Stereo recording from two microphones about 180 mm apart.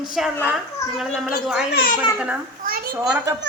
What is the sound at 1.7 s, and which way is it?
Speech, 50° left (ahead or behind).